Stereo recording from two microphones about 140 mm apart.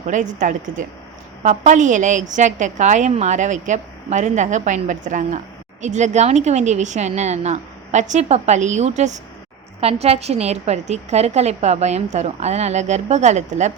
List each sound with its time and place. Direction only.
0.1 s a woman's voice: 65° right (ahead or behind)